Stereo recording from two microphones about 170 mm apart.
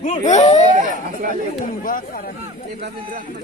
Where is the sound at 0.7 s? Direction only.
50° right (ahead or behind).